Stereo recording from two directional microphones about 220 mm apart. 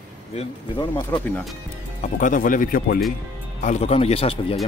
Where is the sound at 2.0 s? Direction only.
35° left (ahead or behind).